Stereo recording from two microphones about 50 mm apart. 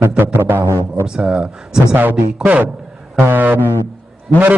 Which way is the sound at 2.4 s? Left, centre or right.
Right.